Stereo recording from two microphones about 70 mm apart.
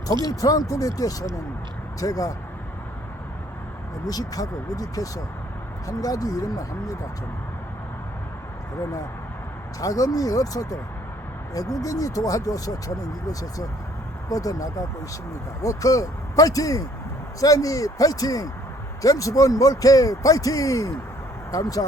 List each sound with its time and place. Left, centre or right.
0.4 s speech: left
4.0 s speech: left
9.8 s speech: left